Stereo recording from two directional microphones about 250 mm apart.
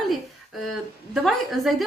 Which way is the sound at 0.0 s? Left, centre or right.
Centre.